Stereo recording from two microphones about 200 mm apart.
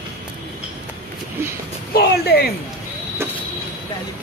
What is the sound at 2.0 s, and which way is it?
Speech, 50° left (ahead or behind).